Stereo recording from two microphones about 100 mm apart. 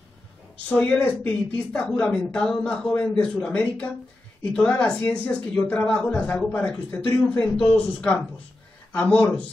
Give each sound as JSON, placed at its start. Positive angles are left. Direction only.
{"t": 0.7, "sound": "speech", "side_deg": 15}